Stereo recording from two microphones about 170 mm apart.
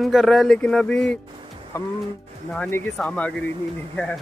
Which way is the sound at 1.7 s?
15° left (ahead or behind).